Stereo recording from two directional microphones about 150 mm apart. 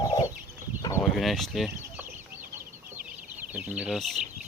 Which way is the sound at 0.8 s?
20° left (ahead or behind).